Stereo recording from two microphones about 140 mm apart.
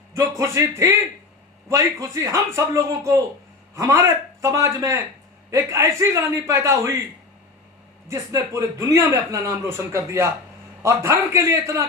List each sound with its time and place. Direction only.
0.1 s speech: 20° right (ahead or behind)
8.0 s speech: 25° right (ahead or behind)